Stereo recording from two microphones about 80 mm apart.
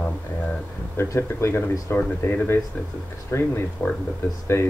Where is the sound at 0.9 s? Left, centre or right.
Left.